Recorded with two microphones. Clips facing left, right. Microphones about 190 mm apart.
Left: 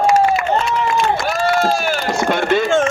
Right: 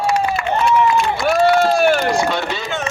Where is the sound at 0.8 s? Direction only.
50° left (ahead or behind).